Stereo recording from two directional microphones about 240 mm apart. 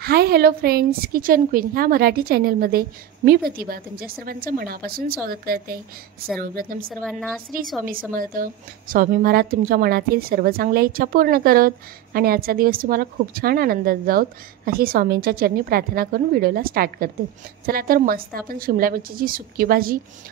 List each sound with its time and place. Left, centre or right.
0.0 s a woman's voice: right
6.9 s a woman's voice: centre
8.1 s a woman's voice: right